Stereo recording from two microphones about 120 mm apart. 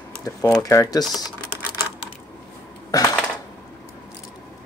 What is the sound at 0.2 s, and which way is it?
Speech, 30° left (ahead or behind).